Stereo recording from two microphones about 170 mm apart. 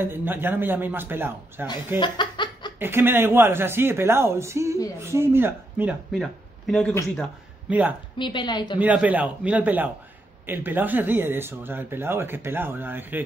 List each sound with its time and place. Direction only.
0.0 s speech: 10° right (ahead or behind)
2.0 s chuckle: 25° left (ahead or behind)
2.8 s speech: 10° right (ahead or behind)
6.7 s speech: 5° left (ahead or behind)
8.2 s speech: 25° left (ahead or behind)
8.7 s speech: 10° right (ahead or behind)